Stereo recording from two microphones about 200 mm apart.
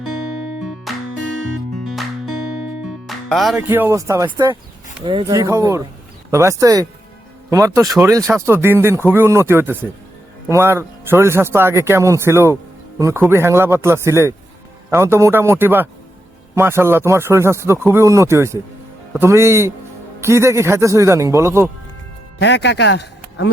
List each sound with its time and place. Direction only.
0.6 s music: centre (ahead or behind)
2.8 s speech: centre (ahead or behind)
22.4 s speech: 60° left (ahead or behind)